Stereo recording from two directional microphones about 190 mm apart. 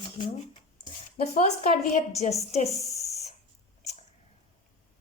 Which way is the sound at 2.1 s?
35° left (ahead or behind).